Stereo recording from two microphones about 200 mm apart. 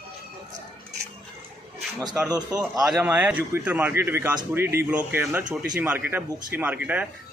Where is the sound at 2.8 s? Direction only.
5° right (ahead or behind).